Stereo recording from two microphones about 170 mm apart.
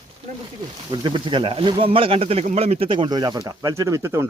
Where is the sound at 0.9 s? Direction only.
30° right (ahead or behind).